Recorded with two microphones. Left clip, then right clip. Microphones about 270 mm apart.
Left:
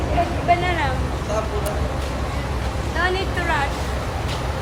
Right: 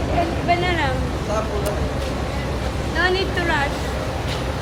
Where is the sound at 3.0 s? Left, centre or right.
Left.